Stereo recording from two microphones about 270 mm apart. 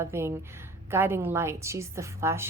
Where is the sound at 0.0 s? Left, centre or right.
Centre.